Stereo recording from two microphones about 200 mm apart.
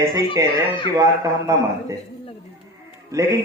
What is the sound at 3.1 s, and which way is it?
Speech, 15° right (ahead or behind).